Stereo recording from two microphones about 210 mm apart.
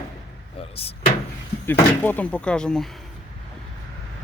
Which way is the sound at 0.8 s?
30° left (ahead or behind).